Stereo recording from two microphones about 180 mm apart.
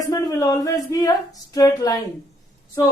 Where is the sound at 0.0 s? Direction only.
20° left (ahead or behind).